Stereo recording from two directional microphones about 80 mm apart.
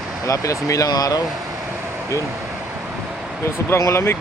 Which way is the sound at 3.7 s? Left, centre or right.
Left.